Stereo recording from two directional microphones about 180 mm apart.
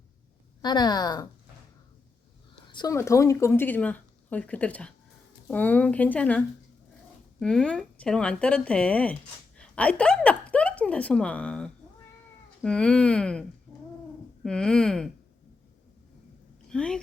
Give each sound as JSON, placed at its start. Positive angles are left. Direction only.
{"t": 0.6, "sound": "speech", "side_deg": 25}
{"t": 2.6, "sound": "a woman's voice", "side_deg": 20}
{"t": 14.4, "sound": "speech", "side_deg": 5}
{"t": 16.6, "sound": "a woman's voice", "side_deg": 5}